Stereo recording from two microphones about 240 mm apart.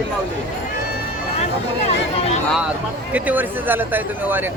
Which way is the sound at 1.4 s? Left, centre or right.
Left.